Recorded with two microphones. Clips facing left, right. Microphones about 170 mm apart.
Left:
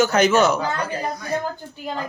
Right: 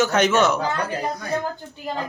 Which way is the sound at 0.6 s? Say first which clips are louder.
Even; 20° right (ahead or behind).